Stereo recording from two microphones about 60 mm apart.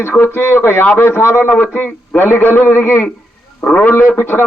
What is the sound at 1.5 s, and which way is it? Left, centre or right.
A man's voice, left.